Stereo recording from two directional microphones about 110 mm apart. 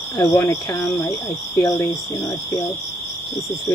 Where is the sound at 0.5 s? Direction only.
30° left (ahead or behind).